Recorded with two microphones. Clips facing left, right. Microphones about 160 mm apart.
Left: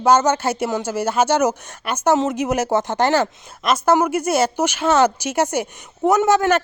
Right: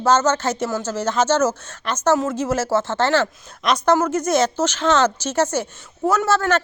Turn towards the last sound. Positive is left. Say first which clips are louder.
# left 3 dB
turn(degrees=15)  # may be behind; listen again after turning